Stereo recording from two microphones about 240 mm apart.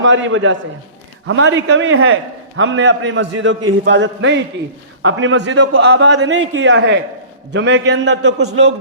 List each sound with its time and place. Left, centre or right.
0.0 s a man's voice: right